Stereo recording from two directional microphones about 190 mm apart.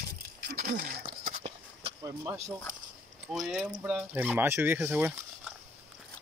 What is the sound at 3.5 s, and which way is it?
Speech, 10° right (ahead or behind).